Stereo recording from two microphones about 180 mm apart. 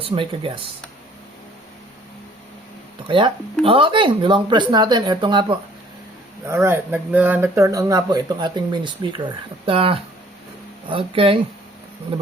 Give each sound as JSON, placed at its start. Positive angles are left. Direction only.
{"t": 0.0, "sound": "speech", "side_deg": -30}
{"t": 3.1, "sound": "speech", "side_deg": -25}
{"t": 6.5, "sound": "speech", "side_deg": -15}